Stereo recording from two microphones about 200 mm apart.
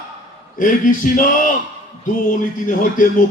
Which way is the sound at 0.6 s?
40° left (ahead or behind).